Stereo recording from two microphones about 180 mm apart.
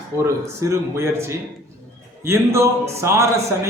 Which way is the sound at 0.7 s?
15° right (ahead or behind).